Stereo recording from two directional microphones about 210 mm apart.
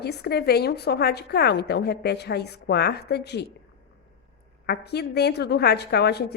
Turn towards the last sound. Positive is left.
turn(degrees=50)  # may be behind; listen again after turning